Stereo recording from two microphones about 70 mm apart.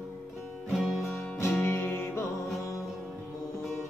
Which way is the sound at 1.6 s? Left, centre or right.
Left.